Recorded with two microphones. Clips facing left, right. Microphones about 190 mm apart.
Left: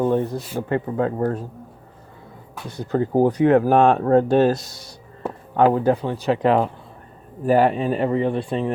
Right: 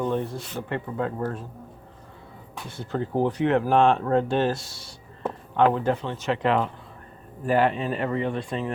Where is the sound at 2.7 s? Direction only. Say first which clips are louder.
Left 7 dB; 40° left (ahead or behind).